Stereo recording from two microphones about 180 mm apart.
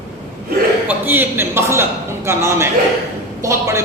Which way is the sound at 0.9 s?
10° right (ahead or behind).